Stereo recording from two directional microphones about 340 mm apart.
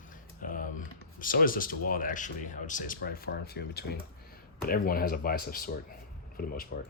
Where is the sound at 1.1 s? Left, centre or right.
Left.